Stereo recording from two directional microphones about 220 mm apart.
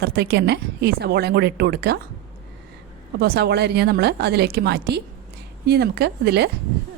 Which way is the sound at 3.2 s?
45° right (ahead or behind).